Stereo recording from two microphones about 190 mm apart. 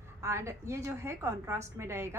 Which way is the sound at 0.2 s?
15° right (ahead or behind).